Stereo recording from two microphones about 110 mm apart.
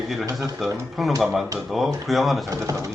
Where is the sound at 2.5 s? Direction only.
30° right (ahead or behind).